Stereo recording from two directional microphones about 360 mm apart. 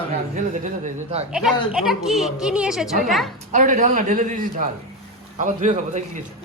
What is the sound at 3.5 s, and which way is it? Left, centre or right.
A man's voice, right.